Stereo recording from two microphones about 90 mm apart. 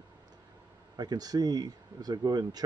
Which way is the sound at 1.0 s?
45° right (ahead or behind).